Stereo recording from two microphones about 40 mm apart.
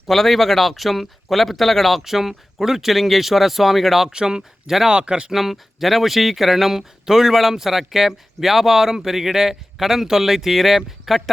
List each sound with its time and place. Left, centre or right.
0.1 s speech: centre
4.1 s speech: centre
4.9 s speech: right
5.3 s speech: centre